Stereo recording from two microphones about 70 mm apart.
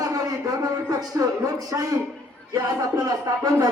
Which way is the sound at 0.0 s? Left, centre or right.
Right.